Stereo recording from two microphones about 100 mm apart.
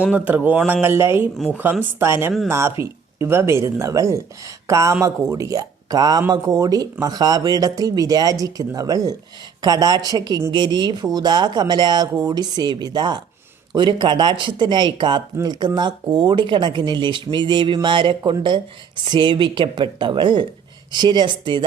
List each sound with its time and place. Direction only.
0.0 s speech: 15° right (ahead or behind); by 21.6 s 50° right (ahead or behind)